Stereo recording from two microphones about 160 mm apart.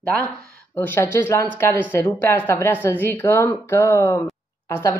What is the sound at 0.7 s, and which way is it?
A woman's voice, 15° left (ahead or behind).